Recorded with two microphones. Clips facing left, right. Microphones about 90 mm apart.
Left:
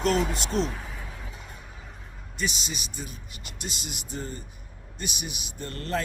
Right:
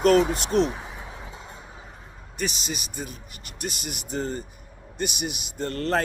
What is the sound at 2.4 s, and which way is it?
A man's voice, 45° right (ahead or behind).